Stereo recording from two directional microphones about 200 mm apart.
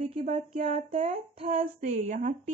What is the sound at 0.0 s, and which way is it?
Speech, 35° right (ahead or behind).